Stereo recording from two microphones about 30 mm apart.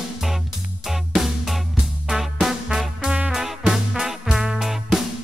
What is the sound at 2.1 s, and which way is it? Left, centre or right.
Music, centre.